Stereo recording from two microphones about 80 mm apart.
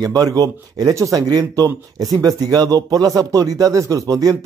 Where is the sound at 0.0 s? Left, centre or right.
Right.